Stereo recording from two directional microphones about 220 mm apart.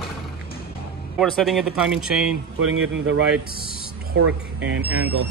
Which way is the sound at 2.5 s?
60° right (ahead or behind).